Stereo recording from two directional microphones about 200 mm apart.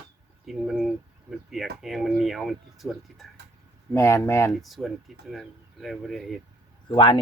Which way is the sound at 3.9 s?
15° left (ahead or behind).